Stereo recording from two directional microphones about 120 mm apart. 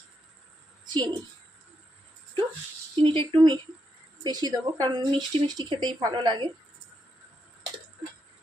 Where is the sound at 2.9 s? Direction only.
40° right (ahead or behind).